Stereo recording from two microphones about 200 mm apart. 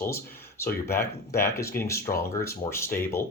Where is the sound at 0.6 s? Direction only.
10° left (ahead or behind).